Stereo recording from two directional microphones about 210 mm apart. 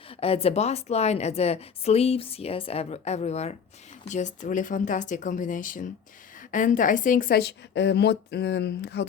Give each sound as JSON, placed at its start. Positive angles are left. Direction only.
{"t": 0.2, "sound": "a woman's voice", "side_deg": 30}